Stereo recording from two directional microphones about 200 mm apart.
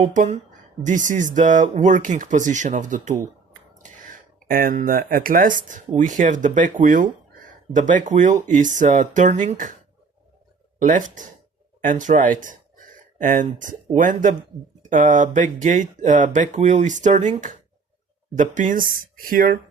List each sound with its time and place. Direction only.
0.0 s speech: 35° right (ahead or behind)
10.8 s speech: 40° right (ahead or behind)
18.3 s speech: 40° right (ahead or behind)